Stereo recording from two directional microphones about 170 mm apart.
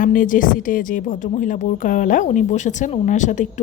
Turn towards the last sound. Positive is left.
turn(degrees=45)  # may be behind; listen again after turning